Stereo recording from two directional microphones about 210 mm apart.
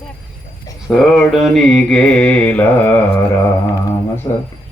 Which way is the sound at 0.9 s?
Centre (ahead or behind).